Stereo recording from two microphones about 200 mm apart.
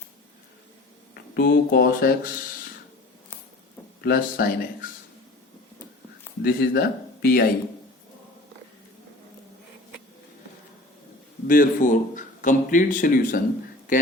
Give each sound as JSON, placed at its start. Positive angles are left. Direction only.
{"t": 1.1, "sound": "speech", "side_deg": 55}
{"t": 4.0, "sound": "speech", "side_deg": 45}
{"t": 6.4, "sound": "speech", "side_deg": 50}
{"t": 11.4, "sound": "speech", "side_deg": 45}